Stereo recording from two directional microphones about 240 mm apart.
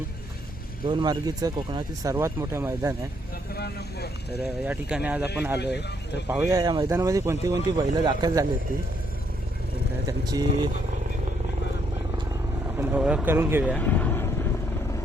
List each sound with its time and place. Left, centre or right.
0.9 s speech: centre
3.5 s speech: left
4.6 s speech: centre
5.5 s speech: left
6.2 s speech: centre
10.1 s speech: centre
12.7 s speech: centre
13.7 s vehicle: centre